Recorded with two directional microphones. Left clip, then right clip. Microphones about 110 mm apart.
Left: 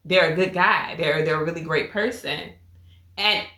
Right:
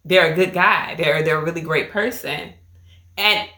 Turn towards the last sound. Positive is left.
turn(degrees=-40)  # may be behind; listen again after turning